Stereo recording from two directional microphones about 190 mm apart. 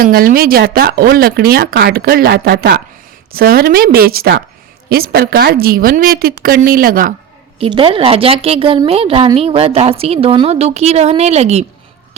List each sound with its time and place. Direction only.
0.0 s speech: 50° right (ahead or behind)
7.6 s a woman's voice: 30° right (ahead or behind)